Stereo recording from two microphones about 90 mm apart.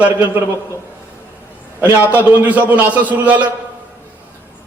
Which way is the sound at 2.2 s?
15° right (ahead or behind).